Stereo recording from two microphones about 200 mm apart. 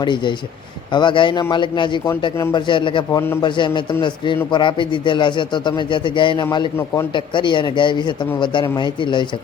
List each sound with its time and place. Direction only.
0.0 s a man's voice: 25° left (ahead or behind)